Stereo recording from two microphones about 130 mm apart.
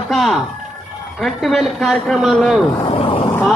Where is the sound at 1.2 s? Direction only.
Centre (ahead or behind).